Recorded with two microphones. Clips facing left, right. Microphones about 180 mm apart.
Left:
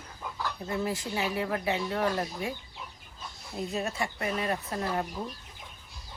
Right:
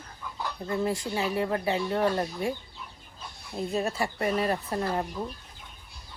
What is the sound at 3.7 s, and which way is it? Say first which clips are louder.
Speech: right 4 dB; 35° right (ahead or behind).